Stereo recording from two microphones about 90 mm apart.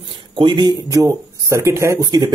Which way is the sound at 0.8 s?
40° right (ahead or behind).